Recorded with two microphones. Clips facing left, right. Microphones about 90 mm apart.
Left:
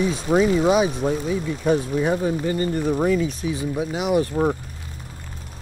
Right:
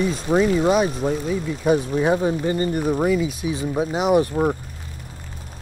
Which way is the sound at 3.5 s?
25° right (ahead or behind).